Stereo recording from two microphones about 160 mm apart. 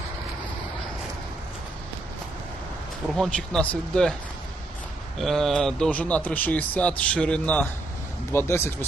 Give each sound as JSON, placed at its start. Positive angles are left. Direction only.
{"t": 3.2, "sound": "speech", "side_deg": 5}
{"t": 5.1, "sound": "speech", "side_deg": 0}